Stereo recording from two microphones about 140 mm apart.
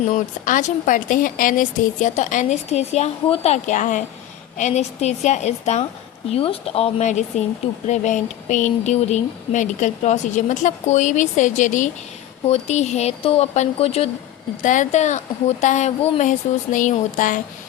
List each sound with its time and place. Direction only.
0.1 s speech: 65° left (ahead or behind)
6.3 s speech: 45° left (ahead or behind)
14.6 s speech: 60° left (ahead or behind)